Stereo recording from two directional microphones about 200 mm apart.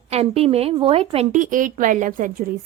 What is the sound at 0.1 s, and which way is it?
A woman's voice, 30° right (ahead or behind).